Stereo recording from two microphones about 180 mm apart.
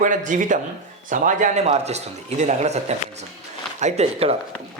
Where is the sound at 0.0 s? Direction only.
45° right (ahead or behind).